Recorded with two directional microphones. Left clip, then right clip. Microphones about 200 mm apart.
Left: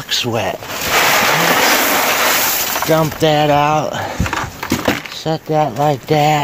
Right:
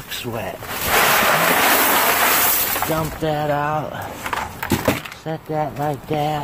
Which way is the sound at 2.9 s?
55° left (ahead or behind).